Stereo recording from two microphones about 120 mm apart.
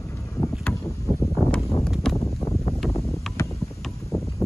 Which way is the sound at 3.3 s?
25° left (ahead or behind).